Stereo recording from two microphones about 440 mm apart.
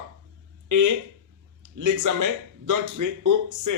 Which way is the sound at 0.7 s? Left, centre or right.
Right.